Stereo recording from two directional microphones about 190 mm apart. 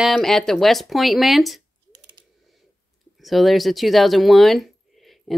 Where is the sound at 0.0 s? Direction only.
Centre (ahead or behind).